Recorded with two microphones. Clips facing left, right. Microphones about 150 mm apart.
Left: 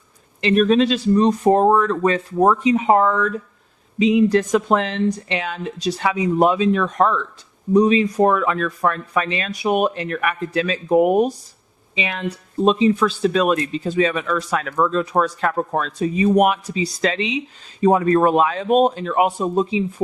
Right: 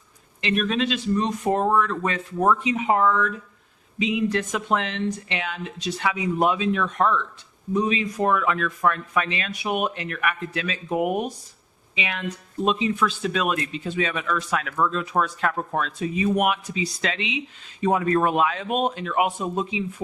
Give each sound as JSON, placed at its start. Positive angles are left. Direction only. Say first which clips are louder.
{"t": 0.4, "sound": "speech", "louder": "left 8 dB", "side_deg": 35}